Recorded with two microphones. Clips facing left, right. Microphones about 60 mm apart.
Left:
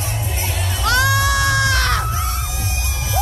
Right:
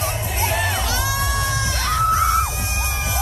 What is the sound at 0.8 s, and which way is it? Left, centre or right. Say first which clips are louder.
Music: left 7 dB; left.